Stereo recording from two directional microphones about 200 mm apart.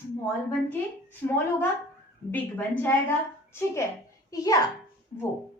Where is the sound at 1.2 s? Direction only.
15° left (ahead or behind).